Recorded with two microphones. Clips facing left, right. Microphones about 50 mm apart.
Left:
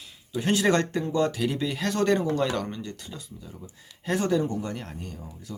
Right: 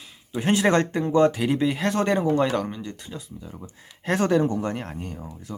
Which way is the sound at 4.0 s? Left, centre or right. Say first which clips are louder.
Right 4 dB; right.